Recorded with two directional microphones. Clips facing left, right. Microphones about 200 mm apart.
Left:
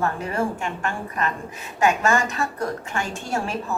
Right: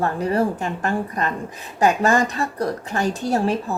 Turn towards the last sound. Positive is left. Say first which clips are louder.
# right 6 dB
turn(degrees=-35)  # may be behind; listen again after turning